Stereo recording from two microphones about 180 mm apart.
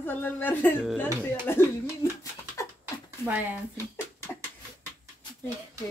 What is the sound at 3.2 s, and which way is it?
Speech, 10° right (ahead or behind).